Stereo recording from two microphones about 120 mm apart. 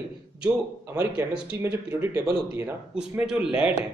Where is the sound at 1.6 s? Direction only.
20° right (ahead or behind).